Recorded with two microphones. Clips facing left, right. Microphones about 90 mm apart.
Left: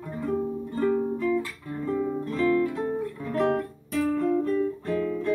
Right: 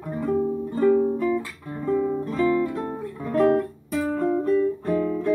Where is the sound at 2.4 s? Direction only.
15° right (ahead or behind).